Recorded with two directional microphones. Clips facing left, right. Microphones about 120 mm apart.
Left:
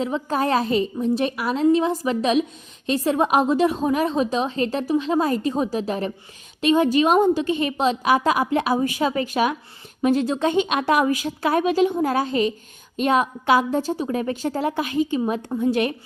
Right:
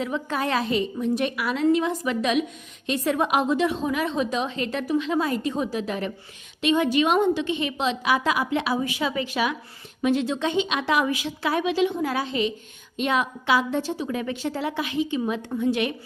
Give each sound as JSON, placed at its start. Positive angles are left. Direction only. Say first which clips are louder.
{"t": 0.0, "sound": "a woman's voice", "louder": "left 4 dB", "side_deg": 35}